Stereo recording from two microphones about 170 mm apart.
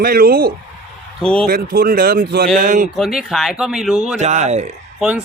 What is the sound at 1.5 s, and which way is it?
Speech, 60° right (ahead or behind).